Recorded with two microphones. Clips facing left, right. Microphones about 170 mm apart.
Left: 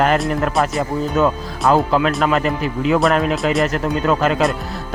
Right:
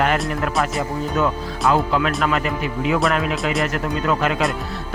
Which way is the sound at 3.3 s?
Centre (ahead or behind).